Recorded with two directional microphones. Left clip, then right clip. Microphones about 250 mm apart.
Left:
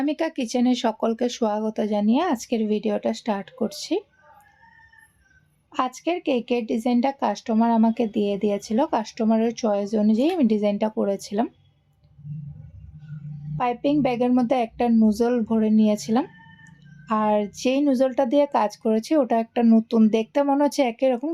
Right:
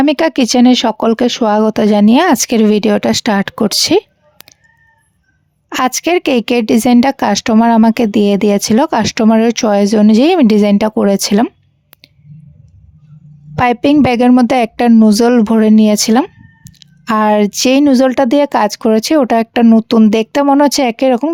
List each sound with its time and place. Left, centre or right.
0.0 s a woman's voice: right
5.6 s a woman's voice: right
13.6 s a woman's voice: right